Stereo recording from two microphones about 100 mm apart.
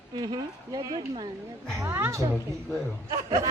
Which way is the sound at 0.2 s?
40° right (ahead or behind).